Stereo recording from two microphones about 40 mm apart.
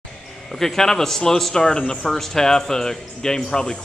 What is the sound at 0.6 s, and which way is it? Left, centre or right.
Speech, centre.